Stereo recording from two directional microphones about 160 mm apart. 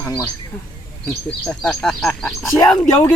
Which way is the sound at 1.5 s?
5° left (ahead or behind).